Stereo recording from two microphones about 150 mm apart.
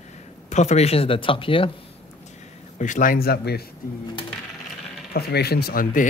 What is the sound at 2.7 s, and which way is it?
Speech, 55° left (ahead or behind).